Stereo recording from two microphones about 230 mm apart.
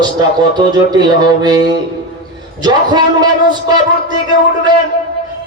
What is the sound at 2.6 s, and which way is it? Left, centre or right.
Speech, centre.